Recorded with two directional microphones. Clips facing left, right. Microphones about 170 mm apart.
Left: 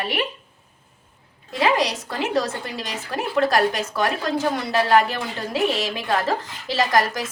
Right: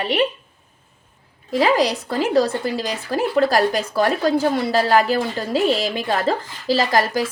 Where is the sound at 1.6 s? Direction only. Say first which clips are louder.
Right 3 dB; 35° right (ahead or behind).